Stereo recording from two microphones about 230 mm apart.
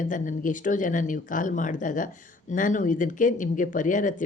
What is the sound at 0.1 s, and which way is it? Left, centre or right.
Speech, left.